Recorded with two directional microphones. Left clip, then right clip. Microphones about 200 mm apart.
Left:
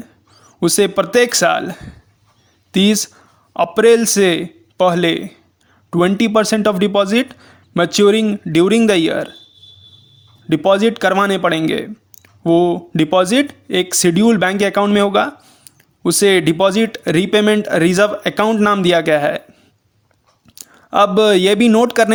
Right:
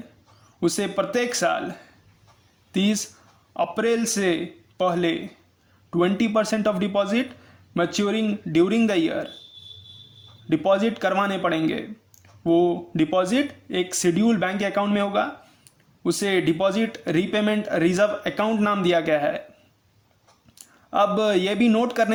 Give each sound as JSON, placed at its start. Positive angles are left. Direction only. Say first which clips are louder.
{"t": 0.4, "sound": "a man's voice", "louder": "left 10 dB", "side_deg": 40}
{"t": 10.5, "sound": "speech", "louder": "left 8 dB", "side_deg": 35}
{"t": 20.6, "sound": "speech", "louder": "left 8 dB", "side_deg": 40}